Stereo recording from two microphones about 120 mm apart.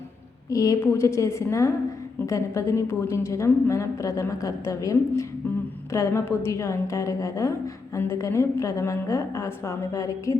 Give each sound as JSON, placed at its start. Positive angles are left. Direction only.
{"t": 0.5, "sound": "a woman's voice", "side_deg": 30}